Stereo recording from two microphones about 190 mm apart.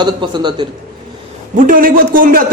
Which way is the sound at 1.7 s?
45° right (ahead or behind).